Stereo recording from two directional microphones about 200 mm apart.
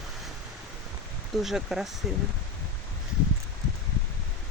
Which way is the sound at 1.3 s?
Centre (ahead or behind).